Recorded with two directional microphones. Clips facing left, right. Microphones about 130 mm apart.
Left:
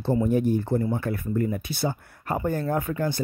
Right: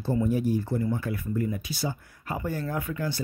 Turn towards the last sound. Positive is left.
turn(degrees=50)  # may be behind; listen again after turning